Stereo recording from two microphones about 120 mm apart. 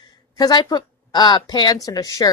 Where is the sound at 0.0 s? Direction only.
35° left (ahead or behind).